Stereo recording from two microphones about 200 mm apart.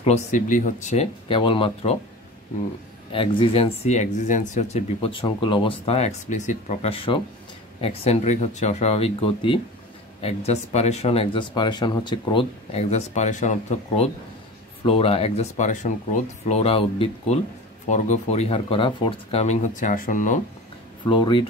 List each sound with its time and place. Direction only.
0.0 s speech: 35° left (ahead or behind)
3.1 s speech: 25° left (ahead or behind)
21.0 s speech: 25° left (ahead or behind)